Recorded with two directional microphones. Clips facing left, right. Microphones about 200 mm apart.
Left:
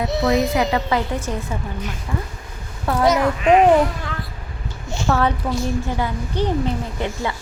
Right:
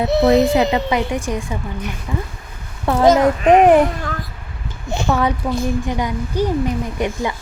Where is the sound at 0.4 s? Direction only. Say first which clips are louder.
Right 4 dB; 25° right (ahead or behind).